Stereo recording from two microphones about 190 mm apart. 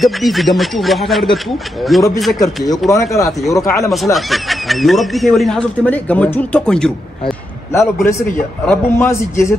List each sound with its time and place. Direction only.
0.0 s speech: centre (ahead or behind)
2.3 s a man's voice: 20° left (ahead or behind)
3.9 s speech: centre (ahead or behind)
7.7 s a man's voice: 15° left (ahead or behind)